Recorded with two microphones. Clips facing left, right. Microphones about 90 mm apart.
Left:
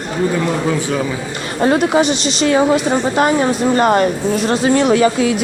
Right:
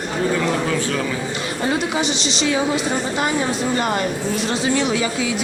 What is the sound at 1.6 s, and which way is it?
Speech, 55° left (ahead or behind).